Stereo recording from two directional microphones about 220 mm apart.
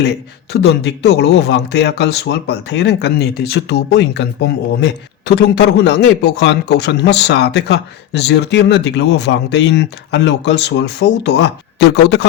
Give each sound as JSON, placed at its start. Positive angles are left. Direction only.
{"t": 0.5, "sound": "speech", "side_deg": 50}